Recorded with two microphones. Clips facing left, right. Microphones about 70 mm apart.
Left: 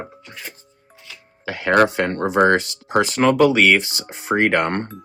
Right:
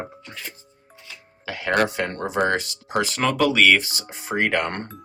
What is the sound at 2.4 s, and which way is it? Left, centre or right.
Speech, left.